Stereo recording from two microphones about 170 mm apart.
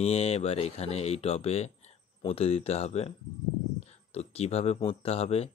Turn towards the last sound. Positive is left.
turn(degrees=35)  # may be behind; listen again after turning